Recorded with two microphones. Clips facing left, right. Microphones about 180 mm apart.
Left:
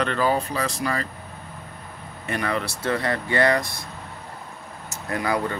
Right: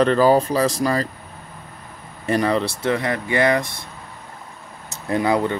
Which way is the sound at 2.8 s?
15° right (ahead or behind).